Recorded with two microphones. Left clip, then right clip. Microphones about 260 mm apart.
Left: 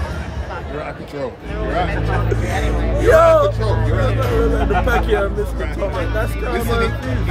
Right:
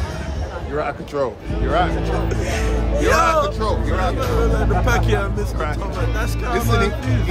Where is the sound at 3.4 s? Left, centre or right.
Centre.